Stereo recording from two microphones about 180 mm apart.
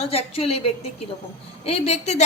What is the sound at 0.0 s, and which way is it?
A man's voice, 35° left (ahead or behind).